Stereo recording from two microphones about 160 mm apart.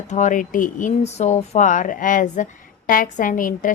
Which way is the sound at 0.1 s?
50° left (ahead or behind).